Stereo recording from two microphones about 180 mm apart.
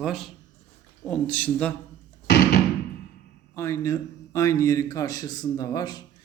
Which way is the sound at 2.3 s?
65° left (ahead or behind).